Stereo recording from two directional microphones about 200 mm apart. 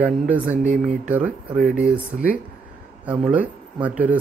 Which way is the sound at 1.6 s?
40° right (ahead or behind).